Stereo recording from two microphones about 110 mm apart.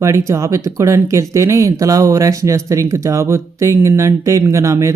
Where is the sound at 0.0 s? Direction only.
25° right (ahead or behind).